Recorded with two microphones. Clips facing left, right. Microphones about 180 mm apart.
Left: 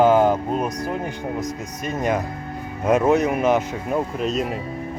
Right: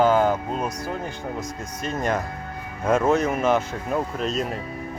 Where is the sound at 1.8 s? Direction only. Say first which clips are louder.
Left 2 dB; 10° left (ahead or behind).